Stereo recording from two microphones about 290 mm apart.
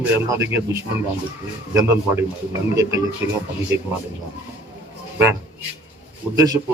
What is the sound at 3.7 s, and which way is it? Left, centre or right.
Speech, right.